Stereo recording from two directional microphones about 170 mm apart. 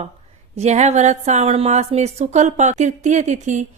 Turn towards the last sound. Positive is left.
turn(degrees=-45)  # may be behind; listen again after turning